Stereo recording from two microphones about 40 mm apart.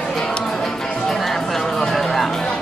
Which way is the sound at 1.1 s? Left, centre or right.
Centre.